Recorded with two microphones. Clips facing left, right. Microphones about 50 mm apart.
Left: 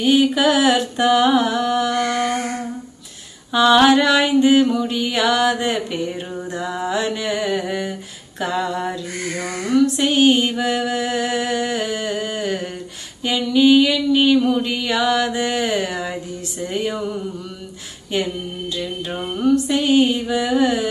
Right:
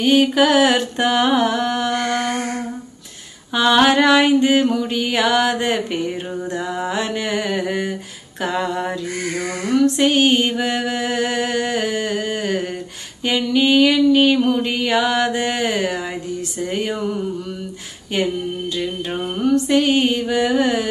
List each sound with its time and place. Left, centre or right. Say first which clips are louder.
0.0 s mantra: right 1 dB; right
3.5 s mantra: left 1 dB; right
6.6 s mantra: left 3 dB; right
9.9 s mantra: even; right
19.4 s mantra: right 1 dB; right